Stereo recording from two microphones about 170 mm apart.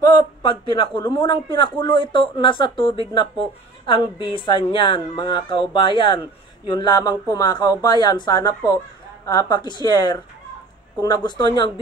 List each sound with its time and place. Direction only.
0.0 s speech: 25° left (ahead or behind)
11.2 s speech: 25° left (ahead or behind)